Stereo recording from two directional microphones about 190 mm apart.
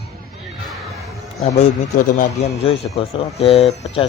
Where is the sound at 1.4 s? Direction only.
35° left (ahead or behind).